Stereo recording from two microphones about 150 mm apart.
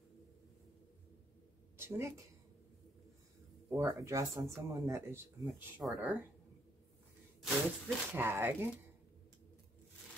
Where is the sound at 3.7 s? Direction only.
20° right (ahead or behind).